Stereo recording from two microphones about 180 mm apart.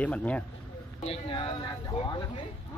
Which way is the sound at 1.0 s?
30° left (ahead or behind).